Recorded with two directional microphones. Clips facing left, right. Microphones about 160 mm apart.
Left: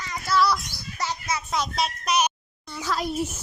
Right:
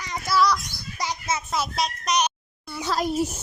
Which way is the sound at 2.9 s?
40° right (ahead or behind).